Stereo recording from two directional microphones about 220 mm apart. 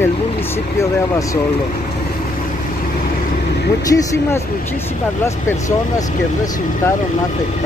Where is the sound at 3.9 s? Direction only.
15° left (ahead or behind).